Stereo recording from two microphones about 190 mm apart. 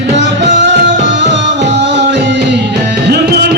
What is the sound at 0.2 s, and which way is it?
Music, 70° right (ahead or behind).